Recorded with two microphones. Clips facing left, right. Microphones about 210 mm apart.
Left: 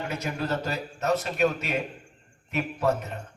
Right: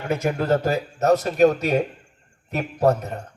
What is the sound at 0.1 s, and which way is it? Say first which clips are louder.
A man's voice: right 12 dB; 55° right (ahead or behind).